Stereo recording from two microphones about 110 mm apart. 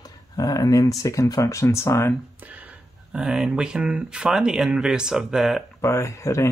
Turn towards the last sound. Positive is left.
turn(degrees=25)  # may be behind; listen again after turning